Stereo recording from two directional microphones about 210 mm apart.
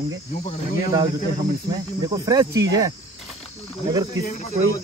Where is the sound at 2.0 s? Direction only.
20° right (ahead or behind).